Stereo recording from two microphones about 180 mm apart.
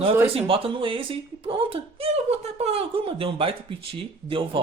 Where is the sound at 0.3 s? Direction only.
30° right (ahead or behind).